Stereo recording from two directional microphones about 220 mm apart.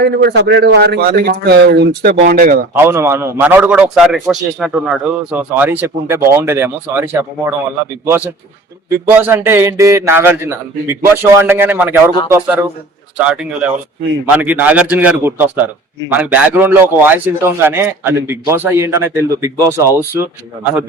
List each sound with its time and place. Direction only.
0.0 s a man's voice: 45° right (ahead or behind)
2.7 s a man's voice: 10° right (ahead or behind)
8.9 s a man's voice: 10° right (ahead or behind)
13.1 s a man's voice: 5° right (ahead or behind)